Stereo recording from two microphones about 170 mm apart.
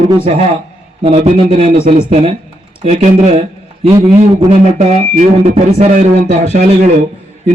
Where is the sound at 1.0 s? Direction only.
35° right (ahead or behind).